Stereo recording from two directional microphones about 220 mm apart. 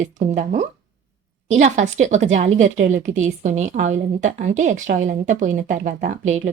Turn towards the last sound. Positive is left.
turn(degrees=-35)  # may be behind; listen again after turning